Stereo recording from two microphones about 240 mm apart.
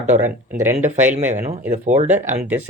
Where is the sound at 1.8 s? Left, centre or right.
Right.